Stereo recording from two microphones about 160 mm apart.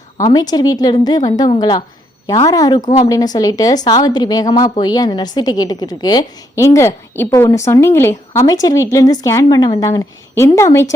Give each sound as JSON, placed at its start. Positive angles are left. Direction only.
{"t": 0.2, "sound": "a woman's voice", "side_deg": 25}